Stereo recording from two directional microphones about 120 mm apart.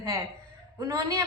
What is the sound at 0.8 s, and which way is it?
Speech, 25° right (ahead or behind).